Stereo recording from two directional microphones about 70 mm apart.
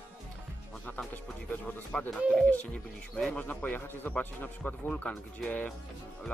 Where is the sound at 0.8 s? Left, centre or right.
Left.